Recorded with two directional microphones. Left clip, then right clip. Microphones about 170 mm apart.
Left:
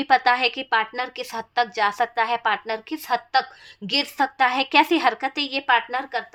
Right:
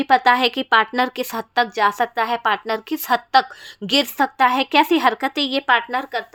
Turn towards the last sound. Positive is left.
turn(degrees=-35)  # may be behind; listen again after turning